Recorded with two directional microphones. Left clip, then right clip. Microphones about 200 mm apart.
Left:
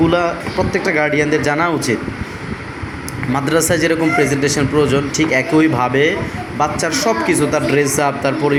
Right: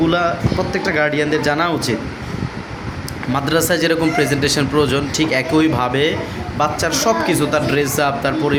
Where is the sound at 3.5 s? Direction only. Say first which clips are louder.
Left 1 dB; 20° right (ahead or behind).